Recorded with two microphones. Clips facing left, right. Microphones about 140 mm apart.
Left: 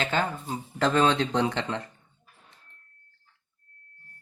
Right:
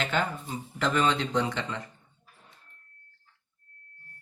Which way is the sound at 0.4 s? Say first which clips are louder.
Left 4 dB; 50° left (ahead or behind).